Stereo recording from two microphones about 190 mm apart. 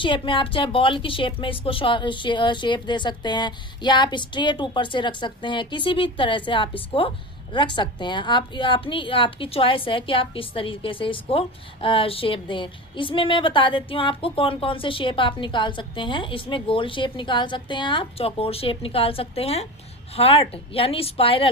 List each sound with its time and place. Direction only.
0.0 s a woman's voice: 25° left (ahead or behind)